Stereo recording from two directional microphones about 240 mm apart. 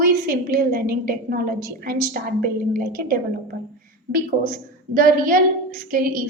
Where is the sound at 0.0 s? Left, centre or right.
Right.